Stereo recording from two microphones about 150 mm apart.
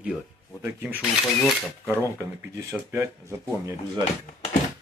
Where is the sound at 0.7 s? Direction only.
15° right (ahead or behind).